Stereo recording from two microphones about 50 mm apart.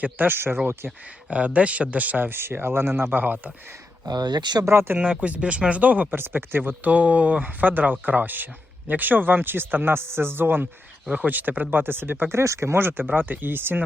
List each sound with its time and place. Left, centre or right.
0.0 s speech: right
1.3 s speech: right
3.1 s speech: right
4.6 s speech: right
5.2 s speech: right
6.1 s speech: right
12.3 s speech: right
12.7 s speech: right